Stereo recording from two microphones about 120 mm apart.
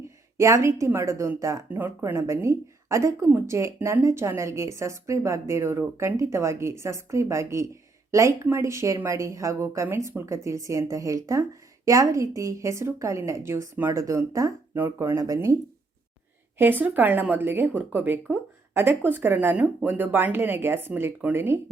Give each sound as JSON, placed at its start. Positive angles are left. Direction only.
{"t": 0.3, "sound": "a woman's voice", "side_deg": -25}
{"t": 16.6, "sound": "speech", "side_deg": -15}